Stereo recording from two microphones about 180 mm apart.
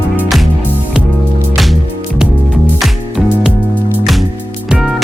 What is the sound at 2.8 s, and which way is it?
Music, centre (ahead or behind).